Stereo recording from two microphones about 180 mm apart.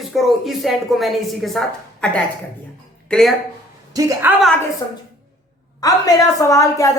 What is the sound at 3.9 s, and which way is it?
Speech, 10° right (ahead or behind).